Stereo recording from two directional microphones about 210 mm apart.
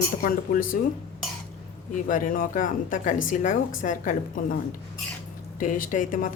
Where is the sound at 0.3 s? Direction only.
40° left (ahead or behind).